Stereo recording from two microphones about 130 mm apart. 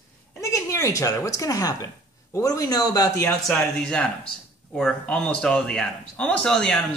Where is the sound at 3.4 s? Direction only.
5° left (ahead or behind).